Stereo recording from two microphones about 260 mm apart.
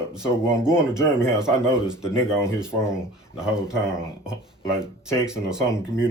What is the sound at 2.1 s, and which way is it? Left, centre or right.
Speech, centre.